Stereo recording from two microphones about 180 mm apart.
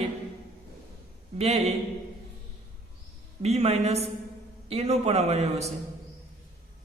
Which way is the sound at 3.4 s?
35° right (ahead or behind).